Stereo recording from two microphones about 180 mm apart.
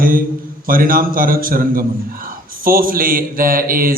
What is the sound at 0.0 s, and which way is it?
A man's voice, 50° right (ahead or behind).